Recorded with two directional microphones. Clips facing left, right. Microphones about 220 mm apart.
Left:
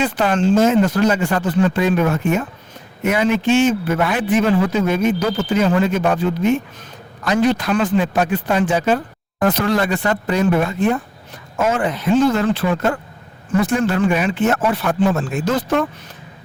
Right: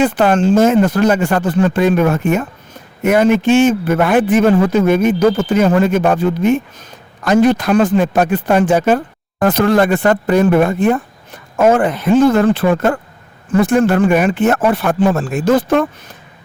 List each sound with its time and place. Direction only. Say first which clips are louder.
0.0 s a man's voice: right 5 dB; 50° right (ahead or behind)